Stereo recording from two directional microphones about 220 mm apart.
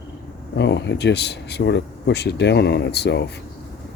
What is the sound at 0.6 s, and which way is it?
Speech, 50° left (ahead or behind).